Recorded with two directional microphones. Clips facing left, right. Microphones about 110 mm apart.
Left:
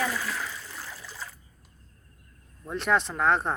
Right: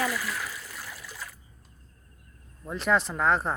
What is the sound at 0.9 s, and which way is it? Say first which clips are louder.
Water: left 1 dB; 30° left (ahead or behind).